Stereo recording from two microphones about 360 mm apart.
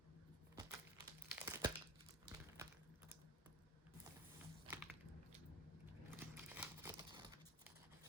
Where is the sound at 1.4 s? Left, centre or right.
Centre.